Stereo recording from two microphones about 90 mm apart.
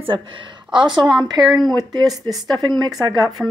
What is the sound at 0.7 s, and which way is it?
Speech, 60° right (ahead or behind).